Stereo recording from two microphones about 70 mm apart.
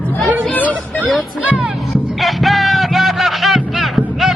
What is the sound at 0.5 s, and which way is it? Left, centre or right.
Music, left.